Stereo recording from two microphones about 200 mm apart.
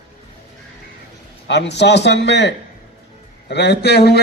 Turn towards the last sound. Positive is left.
turn(degrees=55)  # may be behind; listen again after turning